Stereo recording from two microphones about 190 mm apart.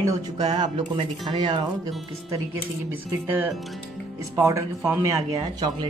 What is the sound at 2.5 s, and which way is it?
Speech, 10° right (ahead or behind).